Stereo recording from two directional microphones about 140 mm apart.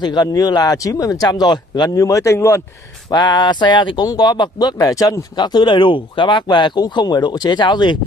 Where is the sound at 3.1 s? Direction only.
30° left (ahead or behind).